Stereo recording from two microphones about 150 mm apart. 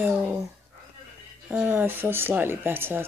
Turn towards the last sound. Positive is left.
turn(degrees=-15)  # may be behind; listen again after turning